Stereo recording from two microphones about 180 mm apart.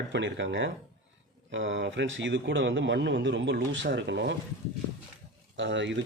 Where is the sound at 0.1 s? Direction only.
85° right.